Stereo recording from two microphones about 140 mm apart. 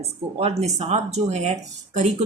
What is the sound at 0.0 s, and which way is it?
Speech, 45° right (ahead or behind).